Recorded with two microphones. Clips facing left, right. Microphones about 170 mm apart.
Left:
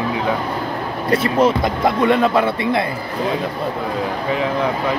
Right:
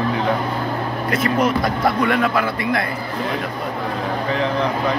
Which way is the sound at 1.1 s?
30° left (ahead or behind).